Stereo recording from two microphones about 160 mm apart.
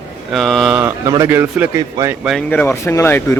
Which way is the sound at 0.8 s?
15° right (ahead or behind).